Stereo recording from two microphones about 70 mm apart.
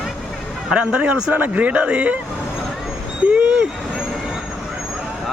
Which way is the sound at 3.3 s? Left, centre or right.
Centre.